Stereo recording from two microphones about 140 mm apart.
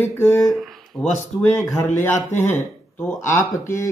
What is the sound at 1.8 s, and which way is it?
Speech, 15° left (ahead or behind).